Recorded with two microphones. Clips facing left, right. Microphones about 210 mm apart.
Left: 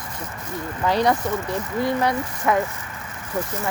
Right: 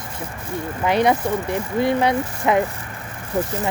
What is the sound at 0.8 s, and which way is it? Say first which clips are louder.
Speech: right 2 dB; 20° right (ahead or behind).